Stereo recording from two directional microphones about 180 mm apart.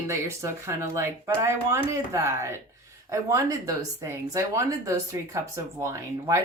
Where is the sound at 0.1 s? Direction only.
15° right (ahead or behind).